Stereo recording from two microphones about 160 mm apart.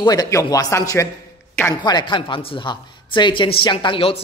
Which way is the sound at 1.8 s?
25° left (ahead or behind).